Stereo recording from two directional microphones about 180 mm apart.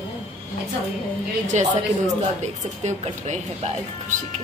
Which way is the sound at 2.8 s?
40° right (ahead or behind).